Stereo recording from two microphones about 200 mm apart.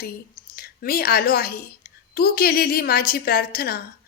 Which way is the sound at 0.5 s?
50° left (ahead or behind).